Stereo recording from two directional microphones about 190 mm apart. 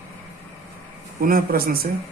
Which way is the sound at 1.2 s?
50° right (ahead or behind).